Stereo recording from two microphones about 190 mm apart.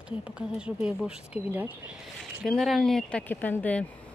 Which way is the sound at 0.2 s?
5° right (ahead or behind).